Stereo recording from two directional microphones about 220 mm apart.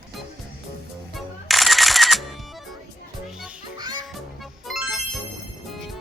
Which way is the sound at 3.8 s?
20° right (ahead or behind).